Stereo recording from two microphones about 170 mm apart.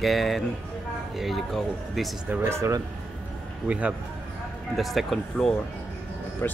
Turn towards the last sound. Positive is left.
turn(degrees=15)  # may be behind; listen again after turning